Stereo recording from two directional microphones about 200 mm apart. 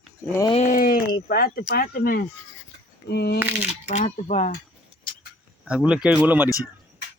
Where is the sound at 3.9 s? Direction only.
35° left (ahead or behind).